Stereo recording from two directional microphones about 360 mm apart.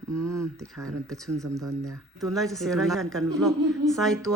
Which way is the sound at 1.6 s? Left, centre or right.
Right.